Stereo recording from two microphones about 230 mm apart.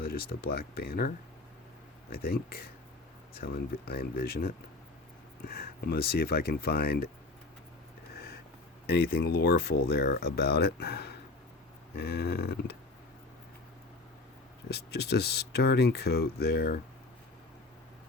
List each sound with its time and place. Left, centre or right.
0.0 s speech: left
8.9 s speech: left
14.7 s speech: left